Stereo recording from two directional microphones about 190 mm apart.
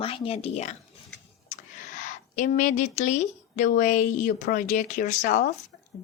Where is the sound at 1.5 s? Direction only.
40° left (ahead or behind).